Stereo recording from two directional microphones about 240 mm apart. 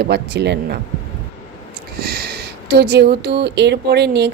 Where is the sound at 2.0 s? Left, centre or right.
Right.